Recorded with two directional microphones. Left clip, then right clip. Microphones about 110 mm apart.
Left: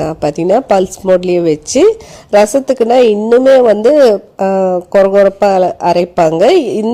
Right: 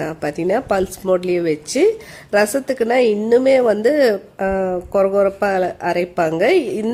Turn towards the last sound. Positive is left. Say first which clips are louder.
# left 7 dB
turn(degrees=45)  # may be behind; listen again after turning